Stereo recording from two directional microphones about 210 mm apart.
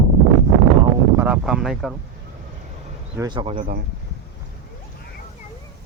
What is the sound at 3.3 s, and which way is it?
Speech, 20° right (ahead or behind).